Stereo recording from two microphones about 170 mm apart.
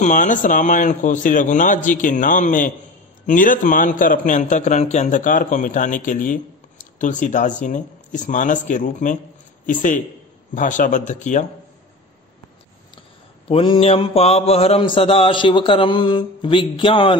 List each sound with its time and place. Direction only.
0.0 s a man's voice: 45° left (ahead or behind)
13.5 s mantra: 35° left (ahead or behind)